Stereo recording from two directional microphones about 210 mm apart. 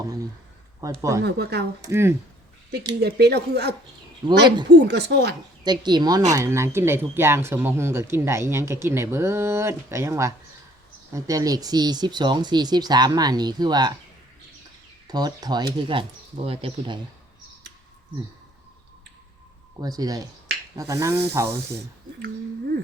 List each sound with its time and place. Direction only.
1.2 s speech: 50° right (ahead or behind)
1.8 s speech: 10° right (ahead or behind)
3.0 s speech: 50° right (ahead or behind)
4.2 s speech: 20° right (ahead or behind)
4.7 s speech: 50° right (ahead or behind)
5.6 s speech: 20° right (ahead or behind)
15.0 s speech: 20° right (ahead or behind)
19.8 s speech: 20° right (ahead or behind)